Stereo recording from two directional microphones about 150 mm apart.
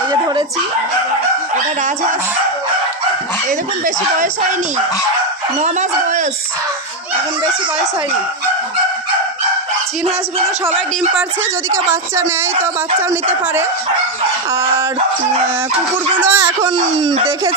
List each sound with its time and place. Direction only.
3.8 s speech: 60° right (ahead or behind)
5.6 s speech: 55° right (ahead or behind)
11.7 s a woman's voice: 15° right (ahead or behind)
16.2 s a woman's voice: 15° right (ahead or behind)
16.6 s speech: 35° right (ahead or behind)